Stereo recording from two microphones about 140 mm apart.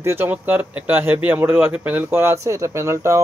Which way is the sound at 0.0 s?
15° right (ahead or behind).